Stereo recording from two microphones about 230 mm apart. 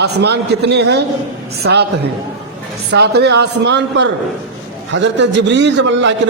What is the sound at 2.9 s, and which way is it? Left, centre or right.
A man's voice, right.